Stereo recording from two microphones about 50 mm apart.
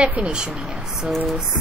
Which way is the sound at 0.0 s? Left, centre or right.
Right.